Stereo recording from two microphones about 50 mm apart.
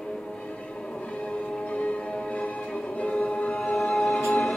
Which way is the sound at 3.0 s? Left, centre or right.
Left.